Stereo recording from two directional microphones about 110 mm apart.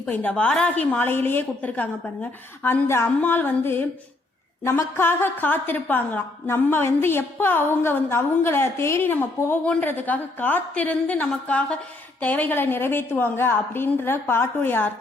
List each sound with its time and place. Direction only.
0.1 s a woman's voice: 15° left (ahead or behind)